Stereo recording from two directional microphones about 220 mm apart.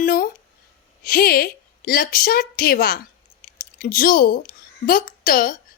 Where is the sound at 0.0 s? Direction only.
40° left (ahead or behind).